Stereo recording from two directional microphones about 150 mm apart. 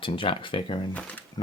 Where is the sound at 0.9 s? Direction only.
10° left (ahead or behind).